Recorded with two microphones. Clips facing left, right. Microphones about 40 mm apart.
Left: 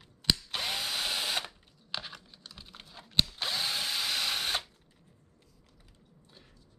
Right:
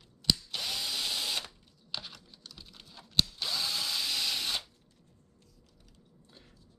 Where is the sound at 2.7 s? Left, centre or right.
Centre.